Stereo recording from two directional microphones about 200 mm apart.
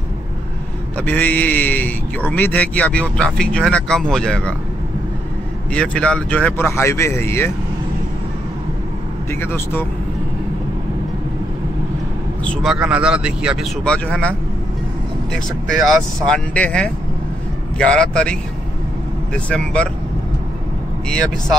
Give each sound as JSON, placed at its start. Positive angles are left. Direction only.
{"t": 0.9, "sound": "a man's voice", "side_deg": 5}
{"t": 5.7, "sound": "a man's voice", "side_deg": 5}
{"t": 9.3, "sound": "a man's voice", "side_deg": 10}
{"t": 12.4, "sound": "speech", "side_deg": -5}
{"t": 13.8, "sound": "speech", "side_deg": 5}
{"t": 15.3, "sound": "speech", "side_deg": 0}